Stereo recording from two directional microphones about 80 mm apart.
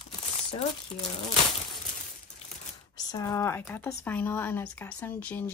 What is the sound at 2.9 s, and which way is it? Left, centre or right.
Speech, left.